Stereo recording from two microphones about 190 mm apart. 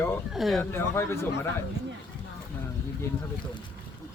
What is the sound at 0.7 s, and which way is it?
Speech, 15° left (ahead or behind).